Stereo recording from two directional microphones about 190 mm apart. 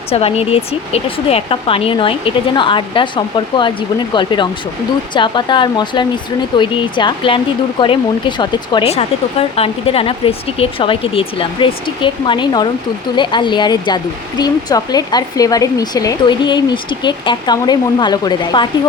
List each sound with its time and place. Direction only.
0.1 s speech: 30° left (ahead or behind)